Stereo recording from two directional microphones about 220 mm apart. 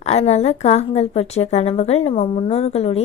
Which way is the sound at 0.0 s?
30° left (ahead or behind).